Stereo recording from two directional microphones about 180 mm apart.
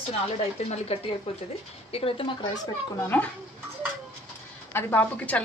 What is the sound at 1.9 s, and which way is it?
Speech, 30° left (ahead or behind).